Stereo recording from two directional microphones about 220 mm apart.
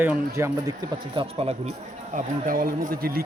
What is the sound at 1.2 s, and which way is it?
Speech, 25° right (ahead or behind).